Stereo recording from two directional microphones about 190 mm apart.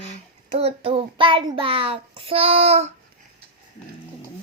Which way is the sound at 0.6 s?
30° right (ahead or behind).